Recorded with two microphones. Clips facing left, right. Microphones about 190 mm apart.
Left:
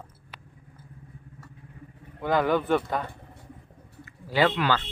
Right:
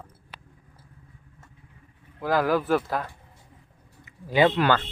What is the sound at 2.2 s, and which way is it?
Speech, centre (ahead or behind).